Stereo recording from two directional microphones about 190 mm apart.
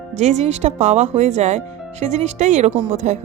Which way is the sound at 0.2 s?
35° right (ahead or behind).